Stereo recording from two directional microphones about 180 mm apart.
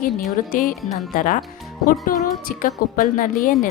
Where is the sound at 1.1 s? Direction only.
50° left (ahead or behind).